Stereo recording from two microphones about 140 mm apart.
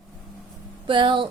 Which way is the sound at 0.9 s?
35° right (ahead or behind).